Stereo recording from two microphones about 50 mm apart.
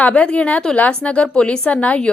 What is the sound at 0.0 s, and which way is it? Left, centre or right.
A woman's voice, left.